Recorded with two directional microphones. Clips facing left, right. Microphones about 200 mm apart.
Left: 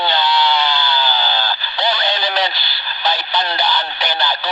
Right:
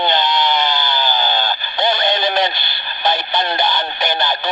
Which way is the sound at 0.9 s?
45° right (ahead or behind).